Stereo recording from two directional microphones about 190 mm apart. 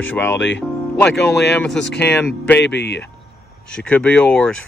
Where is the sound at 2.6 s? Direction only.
65° left (ahead or behind).